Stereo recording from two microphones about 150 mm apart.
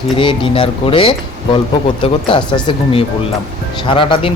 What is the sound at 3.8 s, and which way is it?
Speech, 35° left (ahead or behind).